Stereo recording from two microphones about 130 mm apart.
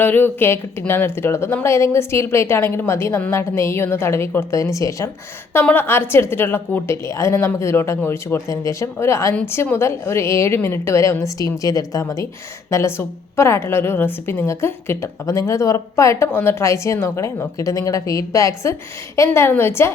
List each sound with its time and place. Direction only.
0.0 s a woman's voice: 15° left (ahead or behind)